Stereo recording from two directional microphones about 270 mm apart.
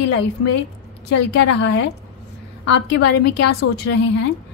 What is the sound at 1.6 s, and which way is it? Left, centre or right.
Speech, left.